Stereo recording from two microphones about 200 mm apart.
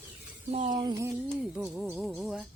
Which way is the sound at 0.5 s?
25° right (ahead or behind).